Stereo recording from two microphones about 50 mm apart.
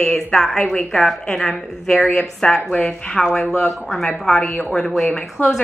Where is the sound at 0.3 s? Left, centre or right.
Centre.